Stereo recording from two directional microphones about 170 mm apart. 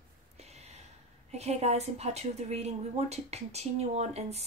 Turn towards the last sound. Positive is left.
turn(degrees=-40)  # may be behind; listen again after turning